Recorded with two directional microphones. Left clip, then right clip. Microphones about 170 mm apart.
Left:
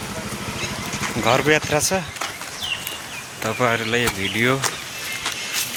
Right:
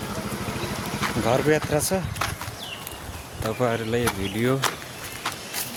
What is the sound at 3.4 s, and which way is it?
Speech, 10° left (ahead or behind).